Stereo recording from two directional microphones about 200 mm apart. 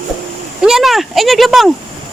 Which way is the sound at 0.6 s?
Centre (ahead or behind).